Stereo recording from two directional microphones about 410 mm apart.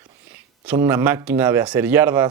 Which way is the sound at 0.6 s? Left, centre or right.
Centre.